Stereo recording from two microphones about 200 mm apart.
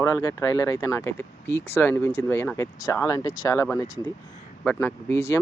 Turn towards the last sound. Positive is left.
turn(degrees=15)  # may be behind; listen again after turning